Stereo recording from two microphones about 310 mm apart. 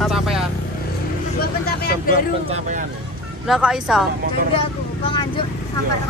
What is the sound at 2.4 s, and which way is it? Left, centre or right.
Speech, right.